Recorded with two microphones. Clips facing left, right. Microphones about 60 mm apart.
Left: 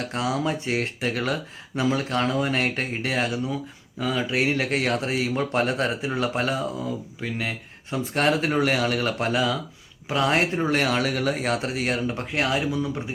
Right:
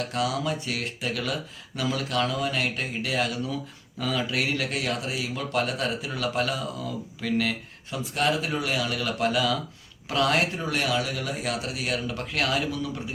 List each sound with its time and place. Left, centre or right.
0.1 s speech: left
7.2 s speech: left
8.1 s speech: left